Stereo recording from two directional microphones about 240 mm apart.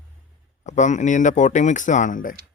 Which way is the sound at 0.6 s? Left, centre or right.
Left.